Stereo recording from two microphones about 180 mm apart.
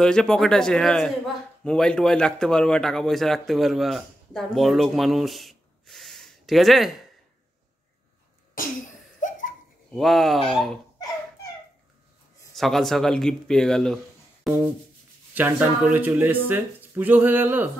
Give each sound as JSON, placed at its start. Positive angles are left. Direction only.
{"t": 0.0, "sound": "a man's voice", "side_deg": 5}
{"t": 9.2, "sound": "a sound", "side_deg": 45}
{"t": 9.9, "sound": "a man's voice", "side_deg": 0}
{"t": 12.5, "sound": "a man's voice", "side_deg": 0}
{"t": 15.3, "sound": "speech", "side_deg": -10}